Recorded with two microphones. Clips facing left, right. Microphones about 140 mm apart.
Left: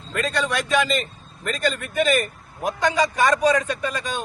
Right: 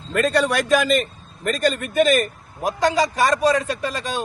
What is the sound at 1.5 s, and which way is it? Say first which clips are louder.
Speech: right 4 dB; 45° right (ahead or behind).